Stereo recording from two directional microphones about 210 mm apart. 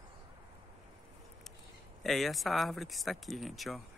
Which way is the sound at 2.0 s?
Centre (ahead or behind).